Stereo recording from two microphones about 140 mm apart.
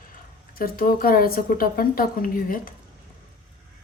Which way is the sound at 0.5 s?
90° left.